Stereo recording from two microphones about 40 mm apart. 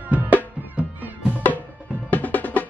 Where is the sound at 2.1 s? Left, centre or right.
Left.